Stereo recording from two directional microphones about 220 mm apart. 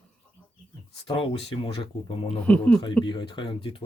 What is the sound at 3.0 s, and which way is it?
Speech, 20° left (ahead or behind).